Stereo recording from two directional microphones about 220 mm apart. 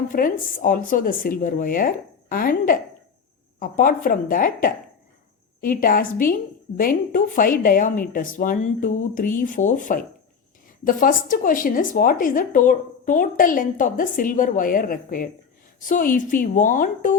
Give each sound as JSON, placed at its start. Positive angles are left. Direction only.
{"t": 0.1, "sound": "a woman's voice", "side_deg": 35}